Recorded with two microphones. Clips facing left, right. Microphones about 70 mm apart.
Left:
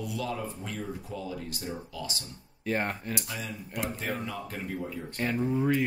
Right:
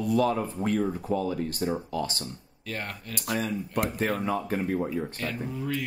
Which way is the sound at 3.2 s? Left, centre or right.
Right.